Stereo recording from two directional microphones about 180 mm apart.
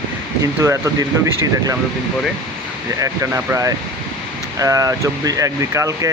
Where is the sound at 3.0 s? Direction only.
15° right (ahead or behind).